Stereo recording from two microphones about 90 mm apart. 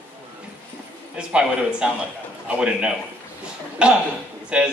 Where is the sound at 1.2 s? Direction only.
10° right (ahead or behind).